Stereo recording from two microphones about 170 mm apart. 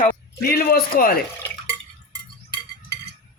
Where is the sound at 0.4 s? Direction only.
60° left (ahead or behind).